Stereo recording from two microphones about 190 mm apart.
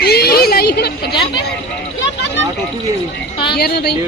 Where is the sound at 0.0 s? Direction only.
55° left (ahead or behind).